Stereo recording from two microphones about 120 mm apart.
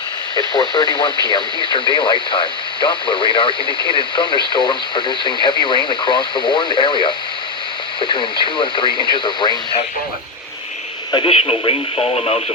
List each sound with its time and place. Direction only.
0.3 s speech: 40° left (ahead or behind)
11.1 s speech: 50° left (ahead or behind)